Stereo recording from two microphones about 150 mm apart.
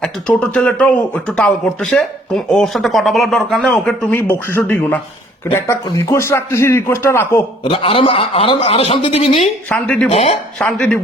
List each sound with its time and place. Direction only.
0.0 s a man's voice: 5° left (ahead or behind)
7.6 s a man's voice: 35° left (ahead or behind)
9.6 s a man's voice: 10° left (ahead or behind)
10.1 s speech: 45° left (ahead or behind)
10.6 s a man's voice: 5° left (ahead or behind)